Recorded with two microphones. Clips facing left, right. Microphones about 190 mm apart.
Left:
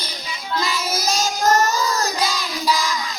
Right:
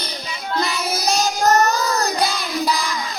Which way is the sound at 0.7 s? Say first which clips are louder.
Right 2 dB; 60° right (ahead or behind).